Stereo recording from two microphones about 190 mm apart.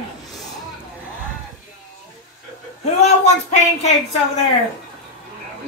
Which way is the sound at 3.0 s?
35° left (ahead or behind).